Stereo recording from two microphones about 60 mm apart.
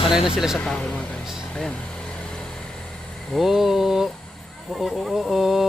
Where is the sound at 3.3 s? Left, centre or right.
Centre.